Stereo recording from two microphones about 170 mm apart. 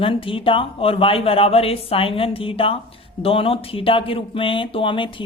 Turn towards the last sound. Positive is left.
turn(degrees=30)  # may be behind; listen again after turning